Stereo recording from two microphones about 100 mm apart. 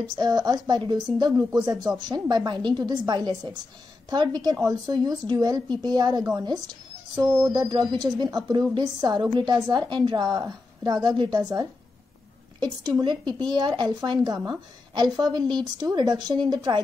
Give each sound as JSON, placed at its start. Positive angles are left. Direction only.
{"t": 0.0, "sound": "a woman's voice", "side_deg": -45}